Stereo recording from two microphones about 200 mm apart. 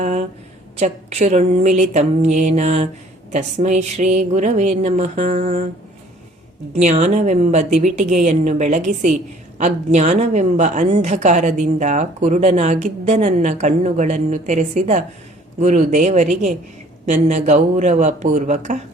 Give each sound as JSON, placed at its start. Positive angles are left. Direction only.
{"t": 0.0, "sound": "a sound", "side_deg": -35}
{"t": 0.8, "sound": "a woman's voice", "side_deg": -35}
{"t": 6.7, "sound": "a woman's voice", "side_deg": -35}